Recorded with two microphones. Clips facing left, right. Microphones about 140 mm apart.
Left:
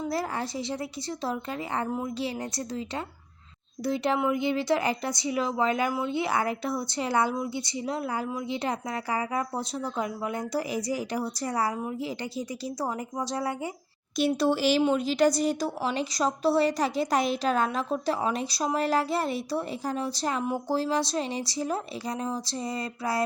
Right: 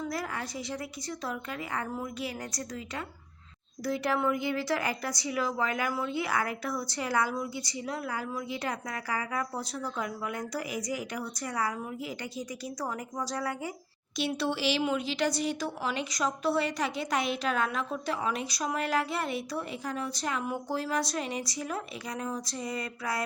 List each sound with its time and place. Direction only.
0.0 s a woman's voice: 30° left (ahead or behind)
14.2 s a woman's voice: 45° left (ahead or behind)